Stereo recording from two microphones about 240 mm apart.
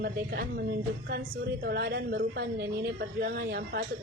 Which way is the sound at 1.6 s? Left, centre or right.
Right.